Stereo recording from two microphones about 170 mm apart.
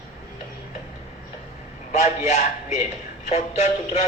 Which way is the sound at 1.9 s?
45° left (ahead or behind).